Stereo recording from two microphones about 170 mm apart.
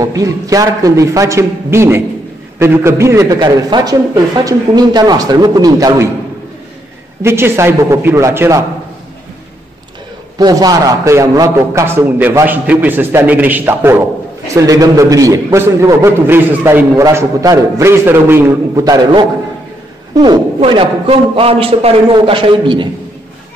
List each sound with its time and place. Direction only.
0.0 s a man's voice: 20° right (ahead or behind)
7.2 s a man's voice: 15° right (ahead or behind)
10.3 s a man's voice: 25° right (ahead or behind)